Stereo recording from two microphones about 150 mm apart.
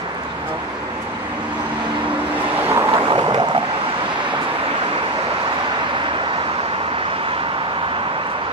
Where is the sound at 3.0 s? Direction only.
30° right (ahead or behind).